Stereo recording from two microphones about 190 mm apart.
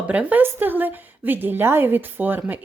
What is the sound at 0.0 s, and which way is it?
A woman's voice, 10° right (ahead or behind).